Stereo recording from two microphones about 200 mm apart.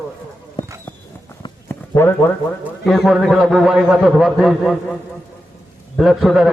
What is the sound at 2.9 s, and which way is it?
A man's voice, centre (ahead or behind).